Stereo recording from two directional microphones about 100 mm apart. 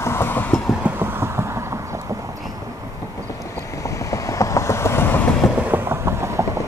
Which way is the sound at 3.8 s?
30° left (ahead or behind).